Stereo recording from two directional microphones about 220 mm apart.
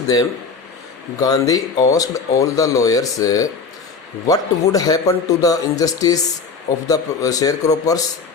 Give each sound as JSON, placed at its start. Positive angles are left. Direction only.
{"t": 0.1, "sound": "speech", "side_deg": 20}